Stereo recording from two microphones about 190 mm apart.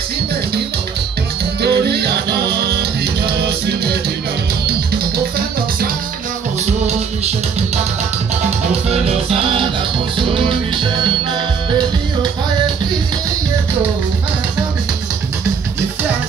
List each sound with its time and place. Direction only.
1.6 s music: 60° right (ahead or behind)
8.9 s music: 30° right (ahead or behind)